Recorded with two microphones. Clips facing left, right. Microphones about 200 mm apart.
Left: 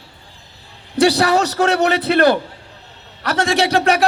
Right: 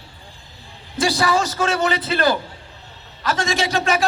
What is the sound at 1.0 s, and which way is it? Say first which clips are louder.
A man's voice: left 5 dB; 65° left (ahead or behind).